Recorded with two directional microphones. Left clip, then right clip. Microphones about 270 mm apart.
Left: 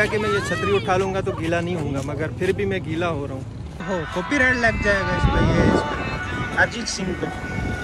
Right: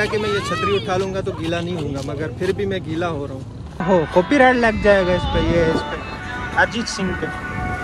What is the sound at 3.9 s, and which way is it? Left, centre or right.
Speech, right.